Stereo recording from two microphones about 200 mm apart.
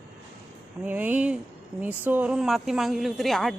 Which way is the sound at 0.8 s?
10° right (ahead or behind).